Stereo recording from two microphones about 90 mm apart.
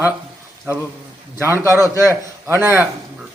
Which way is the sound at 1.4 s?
30° right (ahead or behind).